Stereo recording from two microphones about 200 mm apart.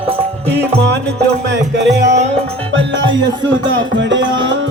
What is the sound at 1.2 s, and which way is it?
Music, 60° right (ahead or behind).